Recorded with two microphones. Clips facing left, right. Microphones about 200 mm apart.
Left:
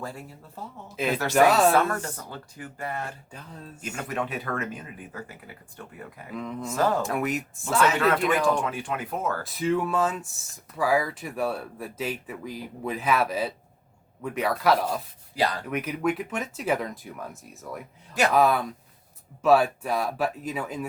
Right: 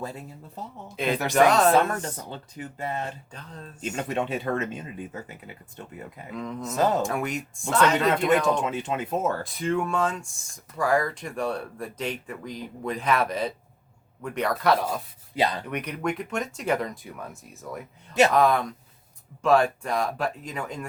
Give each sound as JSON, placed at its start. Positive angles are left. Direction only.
{"t": 0.0, "sound": "speech", "side_deg": -20}
{"t": 0.9, "sound": "speech", "side_deg": 0}
{"t": 2.3, "sound": "speech", "side_deg": -25}
{"t": 3.3, "sound": "speech", "side_deg": 5}
{"t": 3.8, "sound": "speech", "side_deg": -25}
{"t": 6.3, "sound": "speech", "side_deg": 0}
{"t": 6.7, "sound": "speech", "side_deg": -20}
{"t": 7.0, "sound": "speech", "side_deg": 0}
{"t": 8.1, "sound": "speech", "side_deg": -25}
{"t": 9.4, "sound": "speech", "side_deg": 5}
{"t": 15.4, "sound": "speech", "side_deg": -20}
{"t": 15.6, "sound": "speech", "side_deg": 0}